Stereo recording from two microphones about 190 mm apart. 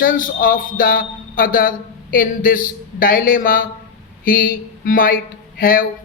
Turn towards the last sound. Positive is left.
turn(degrees=50)  # may be behind; listen again after turning